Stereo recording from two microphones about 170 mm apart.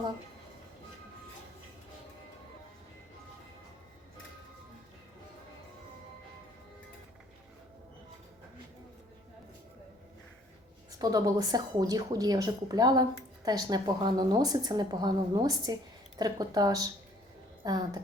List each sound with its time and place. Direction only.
11.0 s a woman's voice: 20° right (ahead or behind)